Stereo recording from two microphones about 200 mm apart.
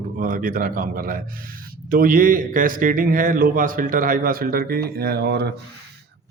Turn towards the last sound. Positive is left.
turn(degrees=-55)  # may be behind; listen again after turning